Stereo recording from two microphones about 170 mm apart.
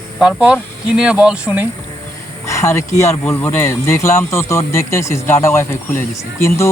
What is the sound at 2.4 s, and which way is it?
Speech, 20° left (ahead or behind).